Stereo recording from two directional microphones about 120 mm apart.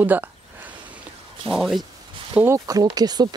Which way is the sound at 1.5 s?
Centre (ahead or behind).